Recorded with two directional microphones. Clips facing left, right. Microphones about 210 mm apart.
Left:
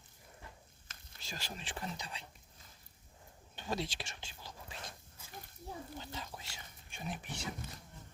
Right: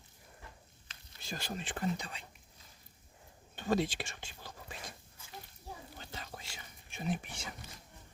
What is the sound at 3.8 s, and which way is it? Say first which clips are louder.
Speech: right 6 dB; 55° right (ahead or behind).